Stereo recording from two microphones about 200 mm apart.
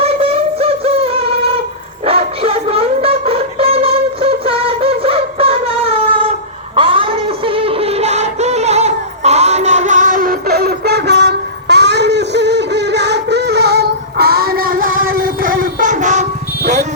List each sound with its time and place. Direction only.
0.0 s music: 30° right (ahead or behind)
2.0 s a sound: 30° right (ahead or behind)
6.7 s music: 25° right (ahead or behind)